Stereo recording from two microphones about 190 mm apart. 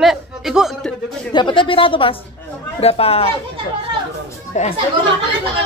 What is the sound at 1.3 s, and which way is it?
A woman's voice, 25° left (ahead or behind).